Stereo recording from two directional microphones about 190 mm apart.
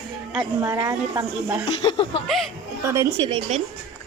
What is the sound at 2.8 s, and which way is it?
Speech, 15° right (ahead or behind).